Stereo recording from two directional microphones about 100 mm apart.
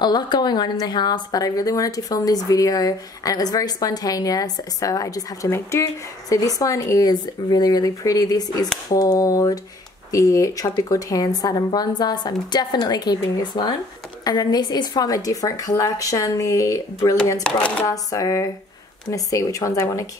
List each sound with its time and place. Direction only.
0.0 s a woman's voice: 45° left (ahead or behind)